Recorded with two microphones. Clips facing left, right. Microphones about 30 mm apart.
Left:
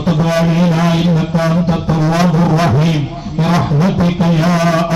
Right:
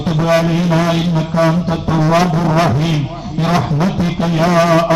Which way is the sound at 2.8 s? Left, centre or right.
Centre.